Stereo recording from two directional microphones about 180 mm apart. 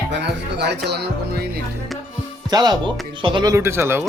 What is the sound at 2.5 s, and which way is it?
Speech, 20° right (ahead or behind).